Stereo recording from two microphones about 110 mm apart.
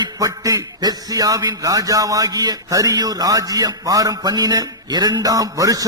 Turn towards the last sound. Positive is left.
turn(degrees=-35)  # may be behind; listen again after turning